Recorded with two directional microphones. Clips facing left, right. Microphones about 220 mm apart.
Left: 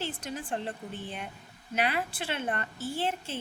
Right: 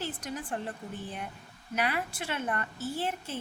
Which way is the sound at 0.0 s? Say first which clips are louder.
Even; 30° left (ahead or behind).